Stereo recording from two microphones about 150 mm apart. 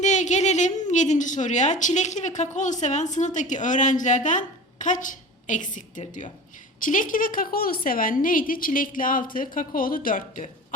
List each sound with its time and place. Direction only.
0.0 s a woman's voice: 55° left (ahead or behind)